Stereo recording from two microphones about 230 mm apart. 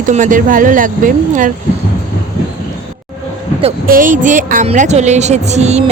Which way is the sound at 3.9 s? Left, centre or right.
Right.